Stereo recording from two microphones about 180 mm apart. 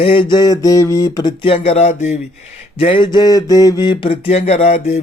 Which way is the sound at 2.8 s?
30° left (ahead or behind).